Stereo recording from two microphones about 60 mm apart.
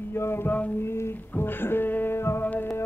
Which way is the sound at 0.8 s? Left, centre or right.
Left.